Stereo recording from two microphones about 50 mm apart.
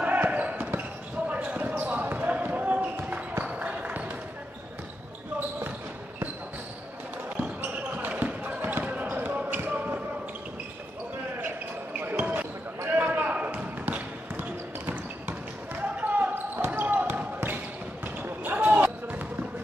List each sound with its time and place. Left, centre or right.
0.0 s basketball bounce: right
7.6 s basketball bounce: right
12.2 s basketball bounce: right
13.3 s a sound: right
14.9 s basketball bounce: right